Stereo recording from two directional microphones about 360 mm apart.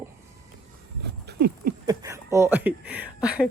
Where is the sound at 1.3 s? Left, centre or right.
Right.